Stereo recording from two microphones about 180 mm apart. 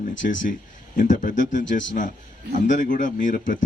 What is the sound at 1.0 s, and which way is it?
A man's voice, 45° left (ahead or behind).